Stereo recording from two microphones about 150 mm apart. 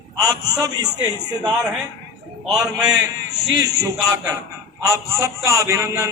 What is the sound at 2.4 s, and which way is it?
Speech, 5° right (ahead or behind).